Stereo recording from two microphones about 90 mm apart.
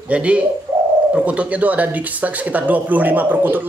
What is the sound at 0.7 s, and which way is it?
Bird, 35° right (ahead or behind).